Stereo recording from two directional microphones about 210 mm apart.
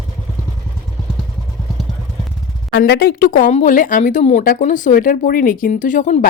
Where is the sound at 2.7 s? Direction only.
45° left (ahead or behind).